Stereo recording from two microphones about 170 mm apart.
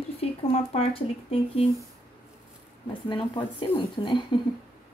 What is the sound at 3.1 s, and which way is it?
Speech, 25° left (ahead or behind).